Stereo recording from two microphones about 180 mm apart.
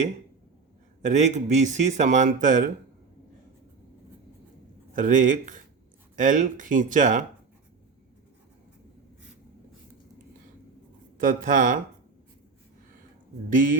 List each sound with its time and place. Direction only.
1.0 s speech: 40° right (ahead or behind)
4.9 s speech: 45° right (ahead or behind)
11.2 s speech: 50° right (ahead or behind)
13.5 s speech: 50° right (ahead or behind)